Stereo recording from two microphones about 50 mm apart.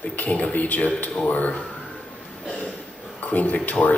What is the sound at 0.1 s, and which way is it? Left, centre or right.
A man's voice, left.